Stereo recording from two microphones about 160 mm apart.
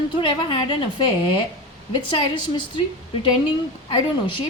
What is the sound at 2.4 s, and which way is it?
Speech, 30° left (ahead or behind).